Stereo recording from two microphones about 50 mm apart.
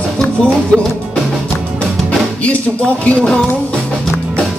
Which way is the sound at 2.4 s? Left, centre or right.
Left.